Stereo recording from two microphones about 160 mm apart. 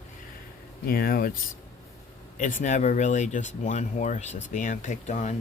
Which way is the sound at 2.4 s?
55° left (ahead or behind).